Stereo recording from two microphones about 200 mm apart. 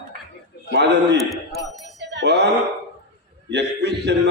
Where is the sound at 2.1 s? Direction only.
55° right (ahead or behind).